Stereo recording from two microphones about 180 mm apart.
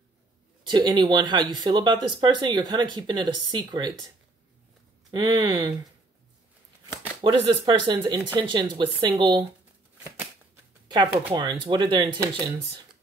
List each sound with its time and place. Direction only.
0.7 s speech: 25° right (ahead or behind)
5.1 s speech: 25° right (ahead or behind)
7.2 s speech: 30° right (ahead or behind)
10.9 s speech: 25° right (ahead or behind)